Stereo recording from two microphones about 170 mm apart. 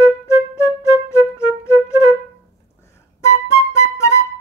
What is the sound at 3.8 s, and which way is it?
Music, 15° left (ahead or behind).